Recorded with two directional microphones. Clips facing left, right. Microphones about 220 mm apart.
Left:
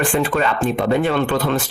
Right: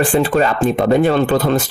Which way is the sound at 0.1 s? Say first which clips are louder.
Right 4 dB; 35° right (ahead or behind).